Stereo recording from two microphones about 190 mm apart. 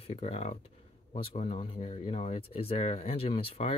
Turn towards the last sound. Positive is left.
turn(degrees=30)  # may be behind; listen again after turning